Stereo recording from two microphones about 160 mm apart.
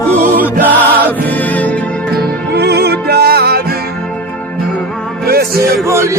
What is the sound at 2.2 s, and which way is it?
Music, 85° right.